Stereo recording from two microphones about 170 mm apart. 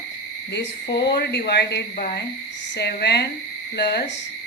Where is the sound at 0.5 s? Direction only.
70° left (ahead or behind).